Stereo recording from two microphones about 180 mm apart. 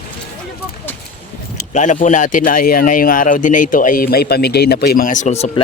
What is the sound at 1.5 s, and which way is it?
Speech, 40° left (ahead or behind).